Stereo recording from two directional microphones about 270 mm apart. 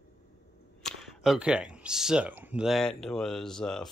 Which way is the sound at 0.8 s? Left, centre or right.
Centre.